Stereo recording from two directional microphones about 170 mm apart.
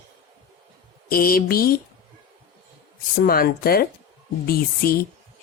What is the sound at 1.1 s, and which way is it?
Speech, 60° left (ahead or behind).